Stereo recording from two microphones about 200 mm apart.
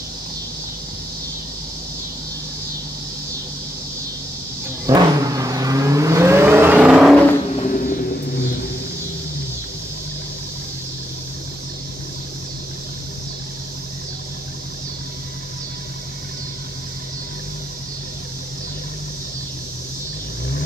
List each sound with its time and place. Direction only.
4.8 s vehicle: 15° right (ahead or behind)
7.5 s vehicle: 40° left (ahead or behind)